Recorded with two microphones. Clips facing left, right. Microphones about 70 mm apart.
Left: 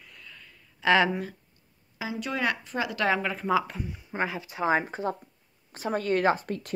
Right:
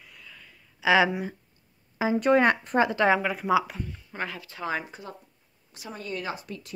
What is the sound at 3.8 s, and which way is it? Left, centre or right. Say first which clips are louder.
Speech: left 4 dB; centre.